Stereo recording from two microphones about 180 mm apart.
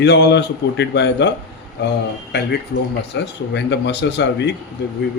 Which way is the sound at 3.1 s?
75° left (ahead or behind).